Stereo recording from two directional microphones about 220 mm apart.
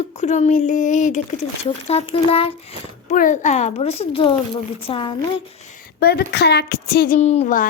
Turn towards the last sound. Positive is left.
turn(degrees=35)  # may be behind; listen again after turning